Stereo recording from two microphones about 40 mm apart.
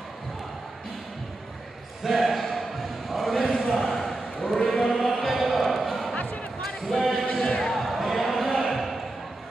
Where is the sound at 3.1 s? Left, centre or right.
Centre.